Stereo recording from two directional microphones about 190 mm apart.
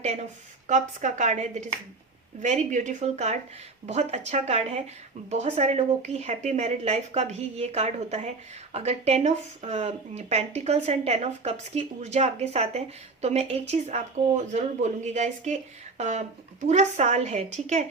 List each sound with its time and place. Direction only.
0.0 s speech: 35° right (ahead or behind)